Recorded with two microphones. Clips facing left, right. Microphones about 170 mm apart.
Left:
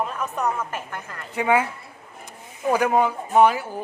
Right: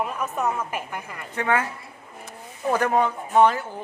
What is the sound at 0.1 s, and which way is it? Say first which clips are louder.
A woman's voice: even; 5° right (ahead or behind).